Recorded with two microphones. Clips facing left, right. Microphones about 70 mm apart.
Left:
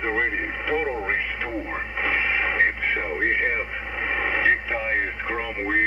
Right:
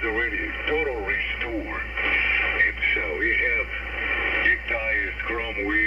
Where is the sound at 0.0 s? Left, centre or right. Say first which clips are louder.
Left 1 dB; left.